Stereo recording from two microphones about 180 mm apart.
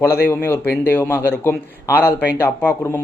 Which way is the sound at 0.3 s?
10° left (ahead or behind).